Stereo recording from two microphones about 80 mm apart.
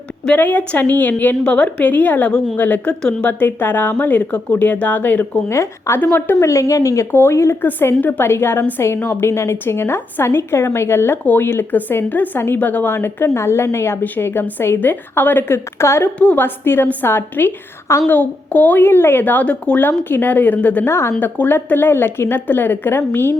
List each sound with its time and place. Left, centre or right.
0.3 s a woman's voice: left
3.2 s a woman's voice: left
5.5 s a woman's voice: left
6.0 s a woman's voice: left
6.4 s a woman's voice: left
7.6 s a woman's voice: left
16.1 s a woman's voice: centre